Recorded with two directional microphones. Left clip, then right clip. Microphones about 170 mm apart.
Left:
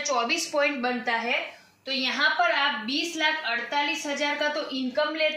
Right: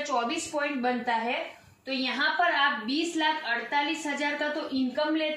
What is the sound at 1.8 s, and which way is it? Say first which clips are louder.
A woman's voice: left 3 dB; 10° left (ahead or behind).